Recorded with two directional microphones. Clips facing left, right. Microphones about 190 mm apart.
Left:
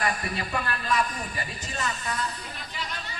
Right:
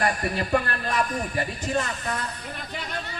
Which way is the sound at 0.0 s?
50° right (ahead or behind).